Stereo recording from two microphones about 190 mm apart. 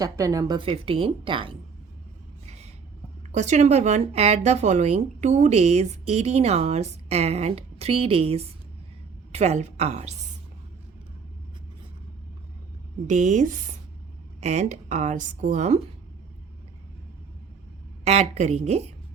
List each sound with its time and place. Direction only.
0.0 s a woman's voice: 15° right (ahead or behind)
3.3 s speech: 40° right (ahead or behind)
13.1 s speech: 40° right (ahead or behind)
18.0 s speech: 35° right (ahead or behind)